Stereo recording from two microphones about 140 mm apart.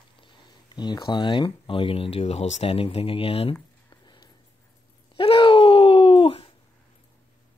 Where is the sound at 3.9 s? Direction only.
30° left (ahead or behind).